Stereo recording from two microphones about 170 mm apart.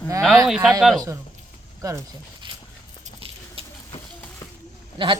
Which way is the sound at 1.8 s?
20° right (ahead or behind).